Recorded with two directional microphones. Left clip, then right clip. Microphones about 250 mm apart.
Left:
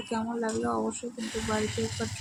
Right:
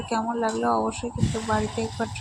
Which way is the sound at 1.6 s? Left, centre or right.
Left.